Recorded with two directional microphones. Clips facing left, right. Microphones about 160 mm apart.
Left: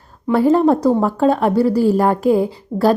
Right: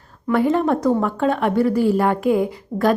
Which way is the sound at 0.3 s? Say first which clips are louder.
Left 4 dB; 35° left (ahead or behind).